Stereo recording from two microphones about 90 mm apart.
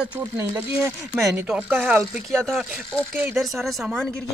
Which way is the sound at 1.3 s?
15° right (ahead or behind).